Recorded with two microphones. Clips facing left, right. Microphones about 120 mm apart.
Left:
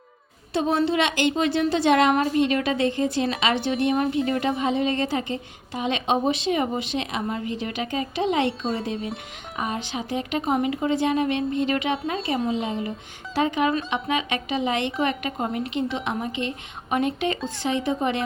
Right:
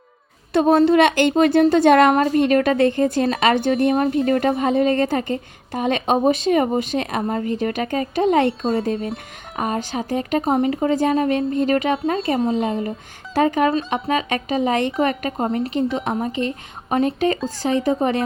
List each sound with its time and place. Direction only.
0.5 s a woman's voice: 50° right (ahead or behind)